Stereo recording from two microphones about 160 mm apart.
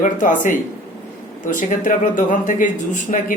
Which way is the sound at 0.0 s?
55° left (ahead or behind).